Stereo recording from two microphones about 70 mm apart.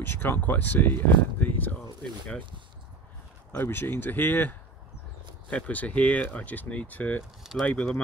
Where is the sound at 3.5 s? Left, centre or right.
Left.